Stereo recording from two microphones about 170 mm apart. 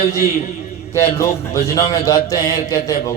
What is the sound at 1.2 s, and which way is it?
A man's voice, 20° left (ahead or behind).